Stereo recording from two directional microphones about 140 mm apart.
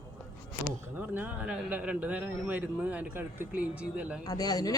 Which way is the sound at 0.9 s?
10° right (ahead or behind).